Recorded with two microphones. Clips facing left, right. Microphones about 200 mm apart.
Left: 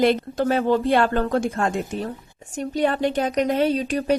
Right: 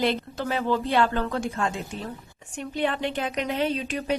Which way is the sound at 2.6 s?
40° left (ahead or behind).